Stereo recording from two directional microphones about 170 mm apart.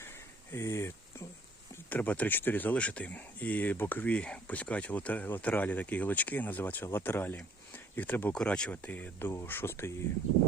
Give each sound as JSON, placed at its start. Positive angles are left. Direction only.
{"t": 0.5, "sound": "speech", "side_deg": 15}